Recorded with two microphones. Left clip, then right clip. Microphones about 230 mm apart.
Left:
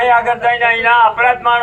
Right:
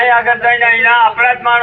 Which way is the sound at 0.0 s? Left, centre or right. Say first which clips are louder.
Right 2 dB; left.